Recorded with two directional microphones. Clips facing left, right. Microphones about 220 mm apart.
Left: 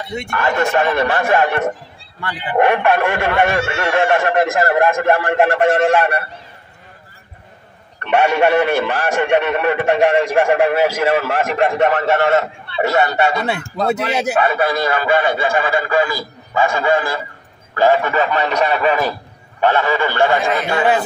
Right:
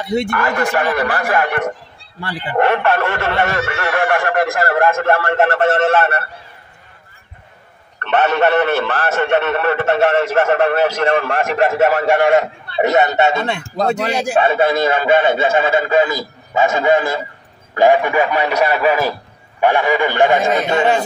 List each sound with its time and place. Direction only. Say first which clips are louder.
0.1 s speech: right 9 dB; 35° right (ahead or behind)
0.4 s a man's voice: left 1 dB; 25° left (ahead or behind)
8.0 s a man's voice: left 1 dB; 10° left (ahead or behind); by 13.5 s 25° right (ahead or behind)
13.7 s speech: right 1 dB; 40° right (ahead or behind)
14.3 s a man's voice: right 4 dB; 25° right (ahead or behind)